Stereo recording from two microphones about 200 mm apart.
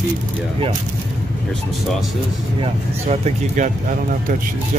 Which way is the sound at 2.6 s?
35° right (ahead or behind).